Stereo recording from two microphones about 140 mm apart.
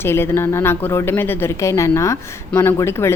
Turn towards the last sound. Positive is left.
turn(degrees=20)  # may be behind; listen again after turning